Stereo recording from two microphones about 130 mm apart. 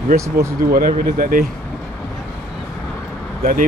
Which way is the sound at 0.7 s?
90° right.